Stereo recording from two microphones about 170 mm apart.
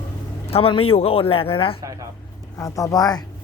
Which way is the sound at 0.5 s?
35° left (ahead or behind).